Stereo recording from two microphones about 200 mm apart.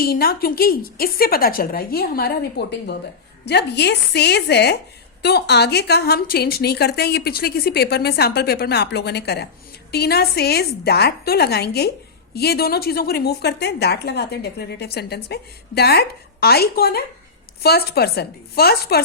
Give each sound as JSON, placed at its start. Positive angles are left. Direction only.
{"t": 0.0, "sound": "a woman's voice", "side_deg": 50}